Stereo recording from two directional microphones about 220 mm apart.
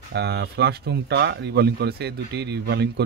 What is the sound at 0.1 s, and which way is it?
A man's voice, 50° right (ahead or behind).